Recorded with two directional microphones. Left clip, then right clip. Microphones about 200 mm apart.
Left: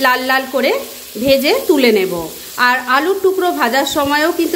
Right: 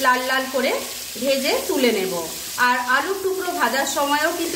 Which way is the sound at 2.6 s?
40° left (ahead or behind).